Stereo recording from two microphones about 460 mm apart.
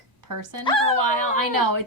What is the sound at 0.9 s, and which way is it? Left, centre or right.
Speech, right.